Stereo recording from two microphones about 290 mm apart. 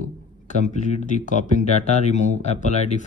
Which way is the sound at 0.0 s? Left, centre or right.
Left.